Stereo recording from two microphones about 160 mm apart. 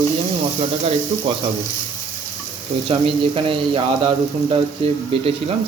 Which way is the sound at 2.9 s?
35° right (ahead or behind).